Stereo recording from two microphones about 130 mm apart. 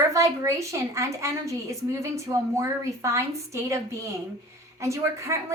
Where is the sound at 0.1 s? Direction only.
25° right (ahead or behind).